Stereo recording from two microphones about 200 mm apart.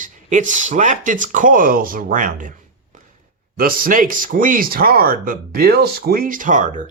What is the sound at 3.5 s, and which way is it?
Speech, 45° right (ahead or behind).